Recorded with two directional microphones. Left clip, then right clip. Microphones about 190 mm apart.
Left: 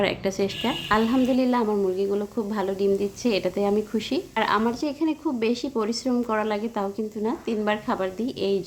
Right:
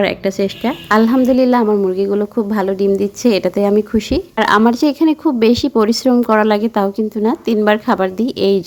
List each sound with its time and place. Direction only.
0.0 s a woman's voice: 30° right (ahead or behind); by 8.6 s 45° right (ahead or behind)